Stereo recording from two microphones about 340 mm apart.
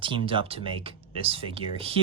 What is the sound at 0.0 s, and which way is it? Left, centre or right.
Speech, centre.